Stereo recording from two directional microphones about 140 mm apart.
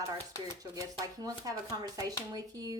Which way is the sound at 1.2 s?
25° right (ahead or behind).